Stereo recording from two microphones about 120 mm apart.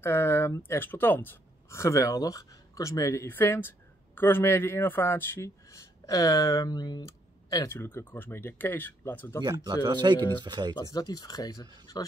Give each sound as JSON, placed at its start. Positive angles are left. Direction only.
{"t": 0.0, "sound": "speech", "side_deg": 20}
{"t": 9.4, "sound": "speech", "side_deg": -35}
{"t": 10.8, "sound": "speech", "side_deg": 30}